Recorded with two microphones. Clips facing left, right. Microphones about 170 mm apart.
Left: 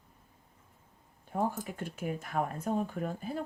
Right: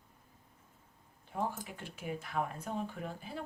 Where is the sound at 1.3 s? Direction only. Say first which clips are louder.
Left 5 dB; 45° left (ahead or behind).